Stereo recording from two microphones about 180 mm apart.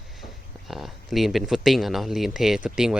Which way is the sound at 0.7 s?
Centre (ahead or behind).